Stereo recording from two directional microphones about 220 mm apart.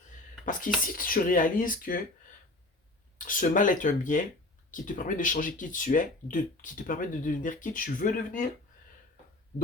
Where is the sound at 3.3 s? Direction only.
35° left (ahead or behind).